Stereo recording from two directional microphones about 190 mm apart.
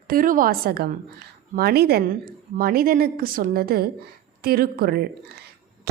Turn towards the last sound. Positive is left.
turn(degrees=-55)  # may be behind; listen again after turning